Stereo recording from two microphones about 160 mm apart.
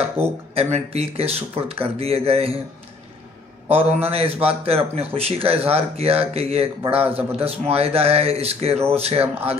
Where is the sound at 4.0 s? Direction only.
40° right (ahead or behind).